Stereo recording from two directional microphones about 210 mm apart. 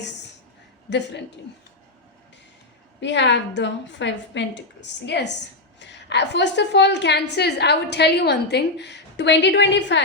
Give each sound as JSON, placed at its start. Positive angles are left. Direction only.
{"t": 0.9, "sound": "a woman's voice", "side_deg": 55}
{"t": 3.0, "sound": "a woman's voice", "side_deg": 55}